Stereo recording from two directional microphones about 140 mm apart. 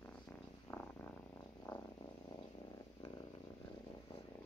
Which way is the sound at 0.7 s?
10° left (ahead or behind).